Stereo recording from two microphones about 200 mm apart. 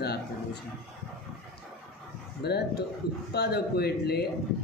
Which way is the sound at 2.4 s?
55° left (ahead or behind).